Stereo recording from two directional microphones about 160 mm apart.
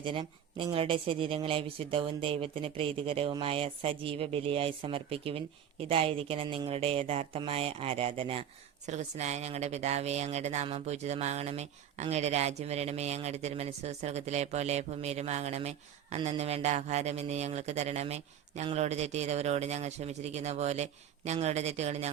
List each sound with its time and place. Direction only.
0.0 s speech: 30° right (ahead or behind)
8.9 s speech: 45° right (ahead or behind)